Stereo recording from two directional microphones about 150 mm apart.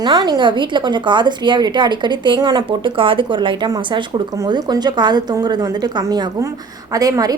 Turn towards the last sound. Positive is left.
turn(degrees=-25)  # may be behind; listen again after turning